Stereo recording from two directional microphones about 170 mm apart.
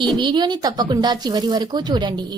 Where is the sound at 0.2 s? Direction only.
25° right (ahead or behind).